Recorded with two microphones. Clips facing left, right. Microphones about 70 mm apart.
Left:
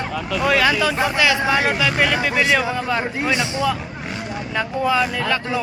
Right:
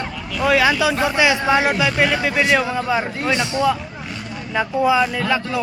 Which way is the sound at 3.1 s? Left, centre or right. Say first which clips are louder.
Even; centre.